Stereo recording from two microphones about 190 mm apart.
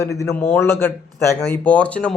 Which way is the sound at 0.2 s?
15° left (ahead or behind).